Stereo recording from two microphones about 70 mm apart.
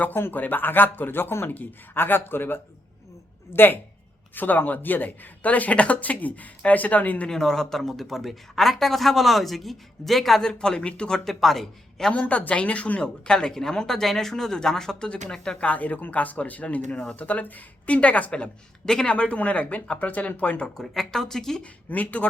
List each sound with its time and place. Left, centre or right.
0.0 s speech: left
7.3 s speech: centre
12.2 s a woman's voice: left; by 21.6 s centre
21.6 s speech: left